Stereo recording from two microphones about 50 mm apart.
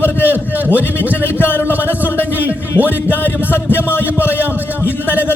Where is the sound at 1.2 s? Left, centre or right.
Left.